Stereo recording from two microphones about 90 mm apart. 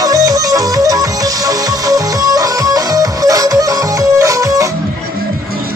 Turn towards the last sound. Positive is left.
turn(degrees=-40)  # may be behind; listen again after turning